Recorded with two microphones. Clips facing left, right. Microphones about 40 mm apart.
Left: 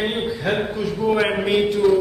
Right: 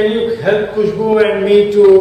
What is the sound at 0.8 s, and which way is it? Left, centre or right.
Speech, centre.